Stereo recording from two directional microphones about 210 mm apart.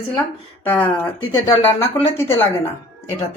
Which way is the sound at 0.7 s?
10° left (ahead or behind).